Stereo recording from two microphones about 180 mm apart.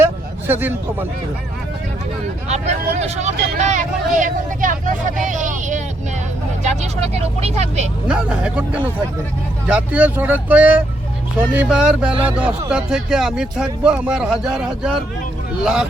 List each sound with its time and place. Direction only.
0.0 s a sound: 10° right (ahead or behind)
2.5 s speech: 40° right (ahead or behind)
8.0 s speech: 5° right (ahead or behind)